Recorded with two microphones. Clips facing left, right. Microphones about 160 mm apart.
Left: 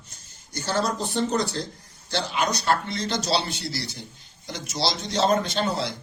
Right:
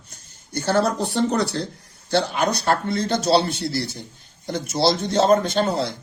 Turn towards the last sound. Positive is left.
turn(degrees=-50)  # may be behind; listen again after turning